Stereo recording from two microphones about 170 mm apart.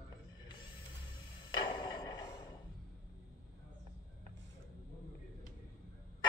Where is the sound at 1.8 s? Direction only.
25° left (ahead or behind).